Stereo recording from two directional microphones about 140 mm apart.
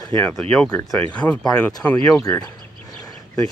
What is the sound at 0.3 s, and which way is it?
Speech, 5° left (ahead or behind).